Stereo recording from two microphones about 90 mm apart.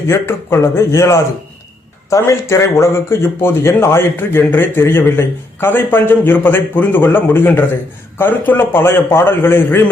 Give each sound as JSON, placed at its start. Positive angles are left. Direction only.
{"t": 0.1, "sound": "a man's voice", "side_deg": 30}